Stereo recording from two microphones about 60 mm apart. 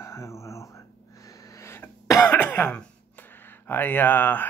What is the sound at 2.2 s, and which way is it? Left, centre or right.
Cough, left.